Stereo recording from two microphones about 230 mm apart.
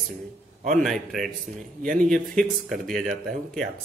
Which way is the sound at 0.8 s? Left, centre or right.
Centre.